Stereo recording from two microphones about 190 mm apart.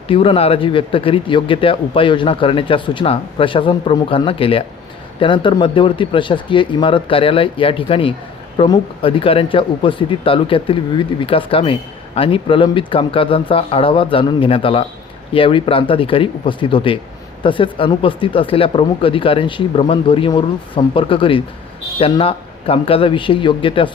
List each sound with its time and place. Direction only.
0.1 s speech: 30° left (ahead or behind)